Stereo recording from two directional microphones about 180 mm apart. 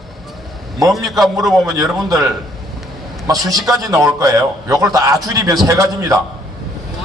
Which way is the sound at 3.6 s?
20° right (ahead or behind).